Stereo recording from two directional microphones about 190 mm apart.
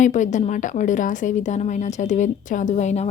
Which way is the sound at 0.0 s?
40° left (ahead or behind).